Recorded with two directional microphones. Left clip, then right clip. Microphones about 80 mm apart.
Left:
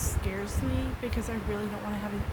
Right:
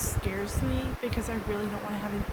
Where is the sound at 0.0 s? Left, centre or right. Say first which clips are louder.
Right 2 dB; centre.